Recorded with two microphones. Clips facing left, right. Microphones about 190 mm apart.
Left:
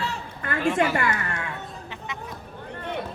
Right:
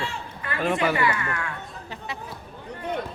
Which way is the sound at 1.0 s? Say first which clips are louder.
Right 2 dB; 45° left (ahead or behind).